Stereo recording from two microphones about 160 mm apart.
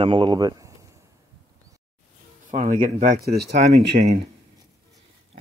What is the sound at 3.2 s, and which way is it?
Speech, 85° right.